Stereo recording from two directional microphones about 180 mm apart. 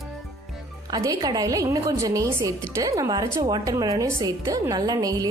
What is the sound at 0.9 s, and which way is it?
A woman's voice, 20° right (ahead or behind).